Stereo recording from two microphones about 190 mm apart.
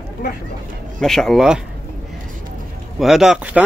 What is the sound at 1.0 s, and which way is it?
Speech, 5° left (ahead or behind).